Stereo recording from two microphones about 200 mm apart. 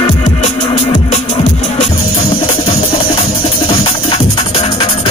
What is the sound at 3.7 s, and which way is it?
Music, 30° left (ahead or behind).